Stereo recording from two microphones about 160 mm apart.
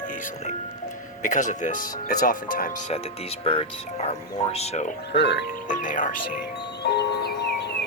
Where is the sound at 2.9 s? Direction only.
40° left (ahead or behind).